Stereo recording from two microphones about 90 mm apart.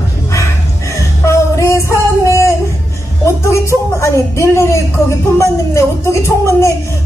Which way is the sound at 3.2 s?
35° left (ahead or behind).